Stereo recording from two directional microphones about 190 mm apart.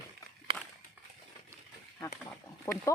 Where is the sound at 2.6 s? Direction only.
15° left (ahead or behind).